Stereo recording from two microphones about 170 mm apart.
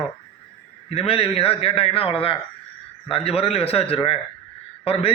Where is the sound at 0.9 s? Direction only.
35° left (ahead or behind).